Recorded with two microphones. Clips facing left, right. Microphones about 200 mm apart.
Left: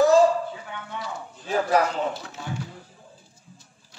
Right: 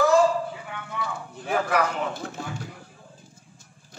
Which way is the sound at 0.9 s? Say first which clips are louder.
Right 3 dB; 55° right (ahead or behind).